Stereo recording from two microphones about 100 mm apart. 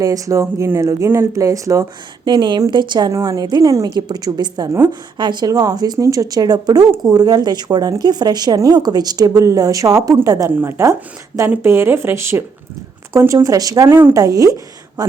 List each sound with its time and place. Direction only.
0.0 s speech: 35° right (ahead or behind)
2.2 s a woman's voice: 50° right (ahead or behind)
3.1 s speech: 35° right (ahead or behind)
3.9 s a woman's voice: 45° right (ahead or behind)
5.5 s speech: 40° right (ahead or behind)
13.8 s speech: 25° right (ahead or behind)
14.2 s speech: 35° right (ahead or behind)